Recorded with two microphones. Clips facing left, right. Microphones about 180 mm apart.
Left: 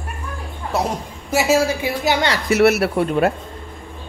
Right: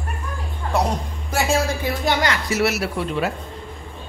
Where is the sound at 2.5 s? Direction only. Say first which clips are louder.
Left 11 dB; 60° left (ahead or behind).